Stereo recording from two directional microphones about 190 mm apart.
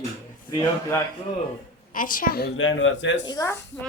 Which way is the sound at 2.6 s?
90° left.